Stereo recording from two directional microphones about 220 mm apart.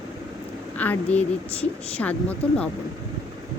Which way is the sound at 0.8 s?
5° left (ahead or behind).